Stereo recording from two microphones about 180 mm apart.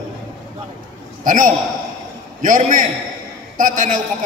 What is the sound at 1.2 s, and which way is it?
A man's voice, 45° right (ahead or behind).